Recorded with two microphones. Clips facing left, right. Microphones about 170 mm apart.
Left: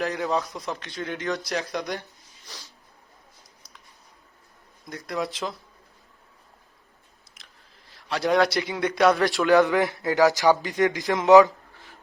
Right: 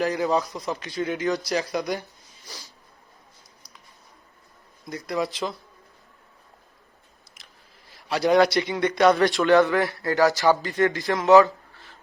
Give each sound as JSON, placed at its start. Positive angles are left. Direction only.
{"t": 0.0, "sound": "a man's voice", "side_deg": 0}
{"t": 4.9, "sound": "a man's voice", "side_deg": 0}
{"t": 8.0, "sound": "a man's voice", "side_deg": -5}
{"t": 9.6, "sound": "speech", "side_deg": 15}